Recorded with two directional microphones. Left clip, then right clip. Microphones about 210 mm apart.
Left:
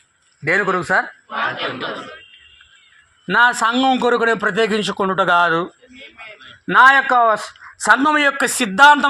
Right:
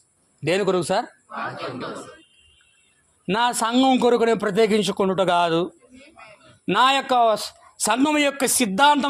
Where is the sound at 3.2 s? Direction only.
15° right (ahead or behind).